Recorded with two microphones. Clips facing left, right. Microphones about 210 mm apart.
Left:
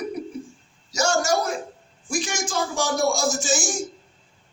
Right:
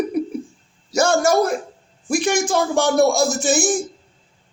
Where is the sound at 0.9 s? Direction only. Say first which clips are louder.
Right 6 dB; 55° right (ahead or behind).